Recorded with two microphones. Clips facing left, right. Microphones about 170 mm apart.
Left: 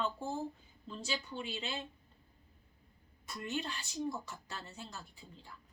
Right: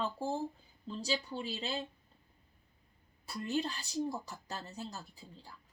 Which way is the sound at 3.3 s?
35° right (ahead or behind).